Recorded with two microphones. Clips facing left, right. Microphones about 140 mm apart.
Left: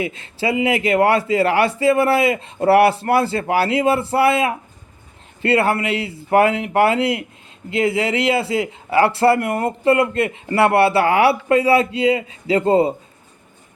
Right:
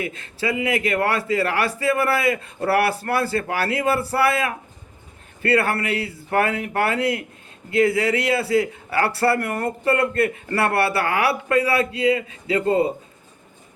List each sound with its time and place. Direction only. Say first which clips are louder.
0.2 s a man's voice: left 5 dB; 25° left (ahead or behind)